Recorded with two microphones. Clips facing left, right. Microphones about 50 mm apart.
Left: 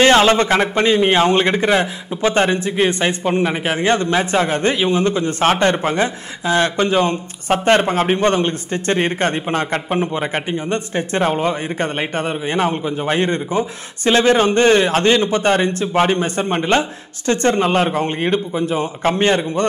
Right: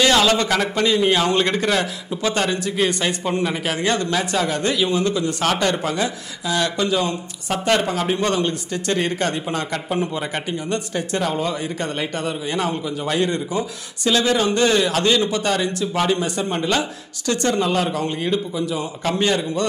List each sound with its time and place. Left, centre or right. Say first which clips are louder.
0.0 s a man's voice: left 5 dB; left